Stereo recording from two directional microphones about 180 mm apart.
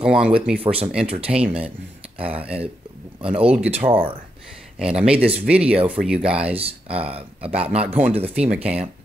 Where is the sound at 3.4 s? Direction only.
5° right (ahead or behind).